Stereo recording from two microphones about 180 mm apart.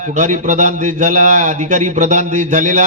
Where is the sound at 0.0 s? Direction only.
40° right (ahead or behind).